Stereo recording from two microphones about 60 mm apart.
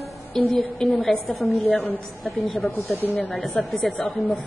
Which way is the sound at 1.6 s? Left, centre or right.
Left.